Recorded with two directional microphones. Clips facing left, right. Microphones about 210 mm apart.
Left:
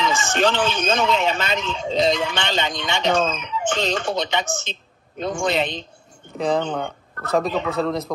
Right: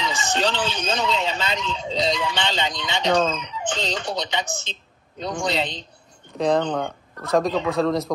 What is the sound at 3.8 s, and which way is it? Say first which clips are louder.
Speech: left 4 dB; 55° left (ahead or behind).